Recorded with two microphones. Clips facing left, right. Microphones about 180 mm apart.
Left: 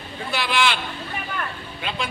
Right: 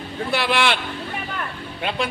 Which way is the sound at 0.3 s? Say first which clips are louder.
Right 2 dB; 60° right (ahead or behind).